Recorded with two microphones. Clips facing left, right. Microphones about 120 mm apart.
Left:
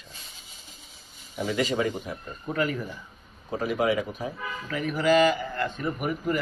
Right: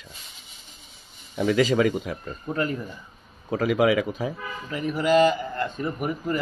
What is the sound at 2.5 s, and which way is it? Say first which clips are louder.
Speech: even; 35° right (ahead or behind).